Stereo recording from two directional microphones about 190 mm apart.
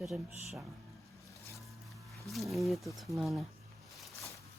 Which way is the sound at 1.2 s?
15° left (ahead or behind).